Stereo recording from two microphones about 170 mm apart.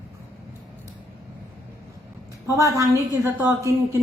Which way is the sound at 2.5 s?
20° right (ahead or behind).